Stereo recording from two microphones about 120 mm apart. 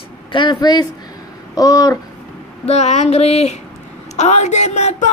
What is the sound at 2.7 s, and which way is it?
A man's voice, 65° left (ahead or behind).